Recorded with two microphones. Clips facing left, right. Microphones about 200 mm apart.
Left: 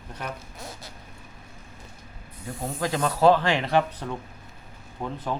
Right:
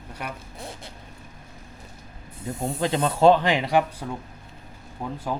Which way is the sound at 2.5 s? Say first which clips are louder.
Right 3 dB; 25° right (ahead or behind).